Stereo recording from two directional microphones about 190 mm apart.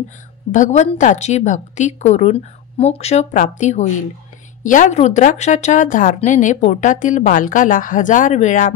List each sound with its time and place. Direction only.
0.5 s a woman's voice: 40° left (ahead or behind)